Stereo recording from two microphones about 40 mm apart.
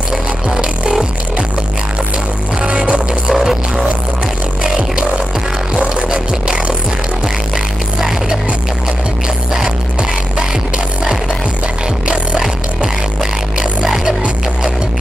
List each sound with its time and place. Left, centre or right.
2.6 s music: right
3.3 s music: centre; by 6.5 s right
7.5 s music: centre
12.1 s music: centre